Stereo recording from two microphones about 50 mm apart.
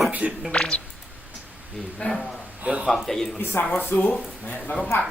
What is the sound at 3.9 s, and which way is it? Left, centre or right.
Speech, left.